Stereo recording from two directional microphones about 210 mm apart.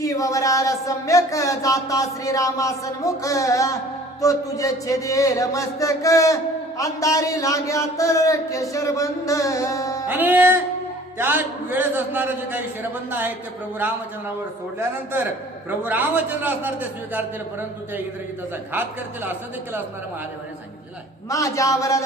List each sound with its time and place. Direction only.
0.0 s speech: 15° left (ahead or behind)
10.1 s a man's voice: 10° right (ahead or behind)
14.8 s a man's voice: 10° right (ahead or behind)
18.7 s a man's voice: 10° right (ahead or behind)
21.2 s speech: 15° left (ahead or behind)